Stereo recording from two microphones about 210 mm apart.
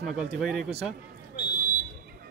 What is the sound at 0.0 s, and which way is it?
Speech, centre (ahead or behind).